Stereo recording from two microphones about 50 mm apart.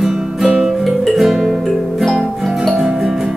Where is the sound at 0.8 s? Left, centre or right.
Centre.